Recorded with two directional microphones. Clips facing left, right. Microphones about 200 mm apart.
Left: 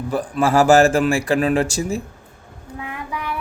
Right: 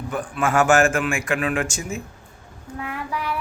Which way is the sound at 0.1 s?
35° left (ahead or behind).